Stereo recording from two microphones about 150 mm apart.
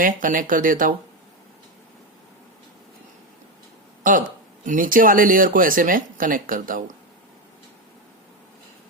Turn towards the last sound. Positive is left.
turn(degrees=-65)  # may be behind; listen again after turning